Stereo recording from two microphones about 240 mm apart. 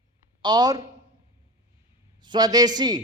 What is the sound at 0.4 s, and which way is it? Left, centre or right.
Speech, centre.